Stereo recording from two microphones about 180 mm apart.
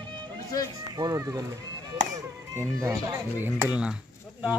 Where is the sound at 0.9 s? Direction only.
20° right (ahead or behind).